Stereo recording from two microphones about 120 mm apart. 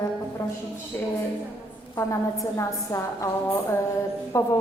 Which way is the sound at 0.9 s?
20° left (ahead or behind).